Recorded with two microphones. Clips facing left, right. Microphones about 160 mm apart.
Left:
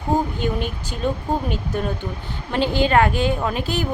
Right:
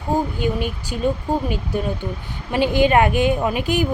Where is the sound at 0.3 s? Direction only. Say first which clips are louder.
Right 2 dB; 10° right (ahead or behind).